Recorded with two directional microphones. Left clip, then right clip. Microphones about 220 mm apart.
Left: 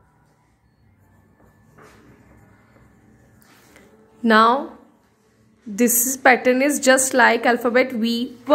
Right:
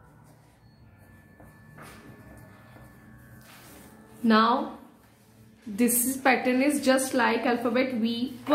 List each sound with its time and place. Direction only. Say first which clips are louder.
4.2 s speech: left 8 dB; 45° left (ahead or behind)
6.0 s a woman's voice: left 10 dB; 45° left (ahead or behind)